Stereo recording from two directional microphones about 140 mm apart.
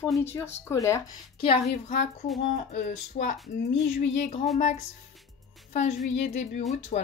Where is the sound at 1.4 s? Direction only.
50° left (ahead or behind); by 3.3 s 65° left (ahead or behind).